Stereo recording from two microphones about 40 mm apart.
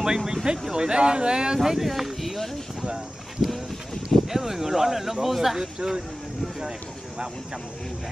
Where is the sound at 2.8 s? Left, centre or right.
Centre.